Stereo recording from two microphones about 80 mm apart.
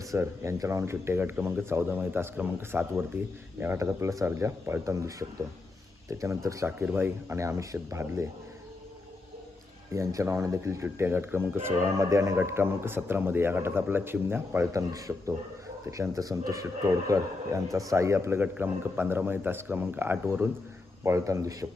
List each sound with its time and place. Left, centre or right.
0.1 s speech: right
6.9 s speech: right
7.3 s speech: right
9.9 s speech: right
12.4 s speech: right
14.7 s speech: right
18.4 s speech: right
21.0 s speech: right